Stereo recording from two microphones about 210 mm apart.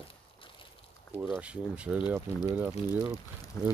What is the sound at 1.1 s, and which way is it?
Speech, 10° right (ahead or behind).